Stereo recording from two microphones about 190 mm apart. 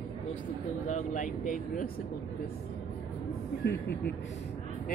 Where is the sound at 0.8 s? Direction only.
40° left (ahead or behind).